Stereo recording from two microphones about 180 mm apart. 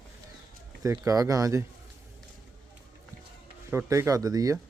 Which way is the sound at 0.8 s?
20° right (ahead or behind).